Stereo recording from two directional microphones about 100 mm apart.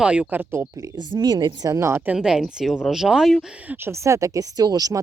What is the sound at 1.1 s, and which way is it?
Speech, 45° right (ahead or behind).